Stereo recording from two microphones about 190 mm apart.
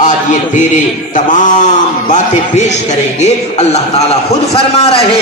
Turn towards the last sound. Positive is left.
turn(degrees=35)  # may be behind; listen again after turning